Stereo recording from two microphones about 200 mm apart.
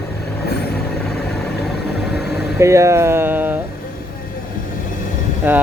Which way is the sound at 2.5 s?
15° right (ahead or behind).